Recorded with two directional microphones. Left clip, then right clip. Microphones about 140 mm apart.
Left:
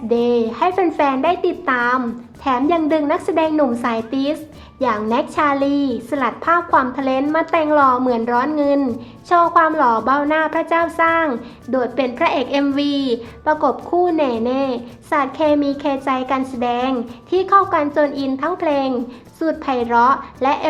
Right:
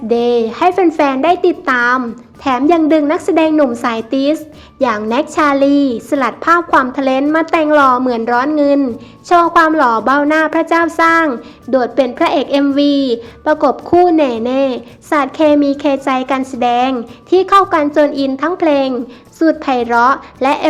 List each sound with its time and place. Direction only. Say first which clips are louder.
0.1 s a child's voice: right 4 dB; 40° right (ahead or behind)